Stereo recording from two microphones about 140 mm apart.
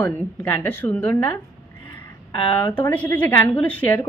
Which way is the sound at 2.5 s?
20° left (ahead or behind).